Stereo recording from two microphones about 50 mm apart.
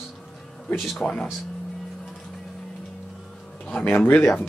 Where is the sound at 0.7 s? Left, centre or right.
Centre.